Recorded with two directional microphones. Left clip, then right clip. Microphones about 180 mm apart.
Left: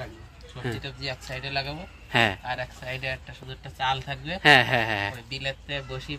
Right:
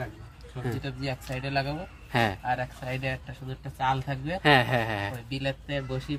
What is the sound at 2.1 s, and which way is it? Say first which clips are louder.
Speech: left 4 dB; centre (ahead or behind).